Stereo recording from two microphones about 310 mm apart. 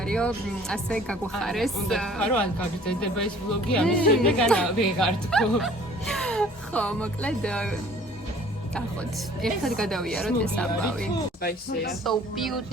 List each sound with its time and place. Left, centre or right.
0.0 s speech: centre
9.4 s speech: centre
11.4 s speech: left
12.0 s speech: centre